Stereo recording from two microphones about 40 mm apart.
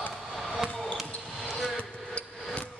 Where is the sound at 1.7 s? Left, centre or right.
Left.